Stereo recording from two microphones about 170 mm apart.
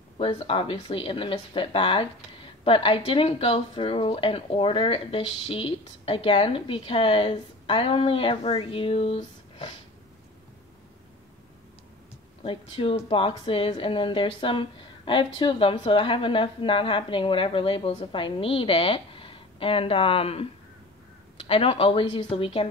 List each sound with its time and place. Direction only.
0.2 s speech: 35° left (ahead or behind)
12.4 s speech: 30° left (ahead or behind)
21.5 s speech: 35° left (ahead or behind)